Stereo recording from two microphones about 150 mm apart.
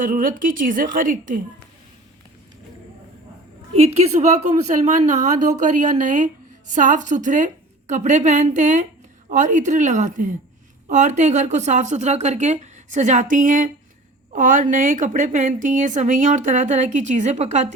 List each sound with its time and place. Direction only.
0.0 s a woman's voice: 65° right (ahead or behind)
3.8 s a woman's voice: 45° right (ahead or behind)